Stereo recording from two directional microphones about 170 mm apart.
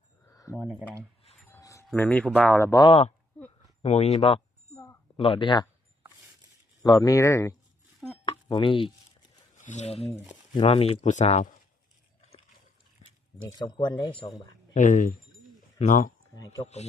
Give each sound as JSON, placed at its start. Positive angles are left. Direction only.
{"t": 0.3, "sound": "a sound", "side_deg": 20}
{"t": 1.5, "sound": "wind chime", "side_deg": 15}
{"t": 1.9, "sound": "speech", "side_deg": 10}
{"t": 2.6, "sound": "speech", "side_deg": 25}
{"t": 3.8, "sound": "speech", "side_deg": 40}
{"t": 4.7, "sound": "a sound", "side_deg": 15}
{"t": 5.1, "sound": "speech", "side_deg": 30}
{"t": 6.8, "sound": "speech", "side_deg": 20}
{"t": 8.2, "sound": "a sound", "side_deg": 30}
{"t": 9.6, "sound": "speech", "side_deg": 45}
{"t": 13.6, "sound": "speech", "side_deg": 25}
{"t": 14.7, "sound": "speech", "side_deg": 45}
{"t": 16.3, "sound": "speech", "side_deg": 20}